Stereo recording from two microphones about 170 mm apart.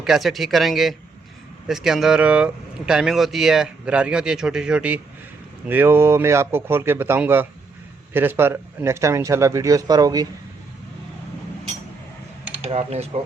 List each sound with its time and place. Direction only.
0.0 s a man's voice: centre (ahead or behind); by 10.2 s 20° right (ahead or behind)
12.6 s speech: 40° right (ahead or behind)